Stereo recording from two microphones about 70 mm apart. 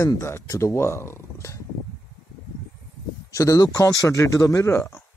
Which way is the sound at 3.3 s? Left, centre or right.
Left.